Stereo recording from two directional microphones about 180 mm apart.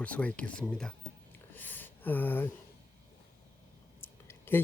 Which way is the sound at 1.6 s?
10° left (ahead or behind).